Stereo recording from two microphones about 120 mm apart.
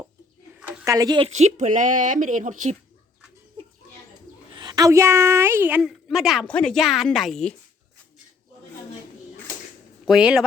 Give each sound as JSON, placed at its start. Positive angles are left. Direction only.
{"t": 0.9, "sound": "speech", "side_deg": -30}
{"t": 1.3, "sound": "speech", "side_deg": -75}
{"t": 4.5, "sound": "a woman's voice", "side_deg": -35}
{"t": 5.8, "sound": "speech", "side_deg": -5}
{"t": 6.5, "sound": "speech", "side_deg": 10}
{"t": 10.1, "sound": "speech", "side_deg": -10}